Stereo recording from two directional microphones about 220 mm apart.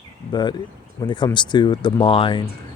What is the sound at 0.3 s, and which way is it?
Speech, 20° left (ahead or behind).